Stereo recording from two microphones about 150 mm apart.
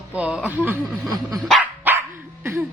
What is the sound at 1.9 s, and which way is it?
Dog, 10° right (ahead or behind).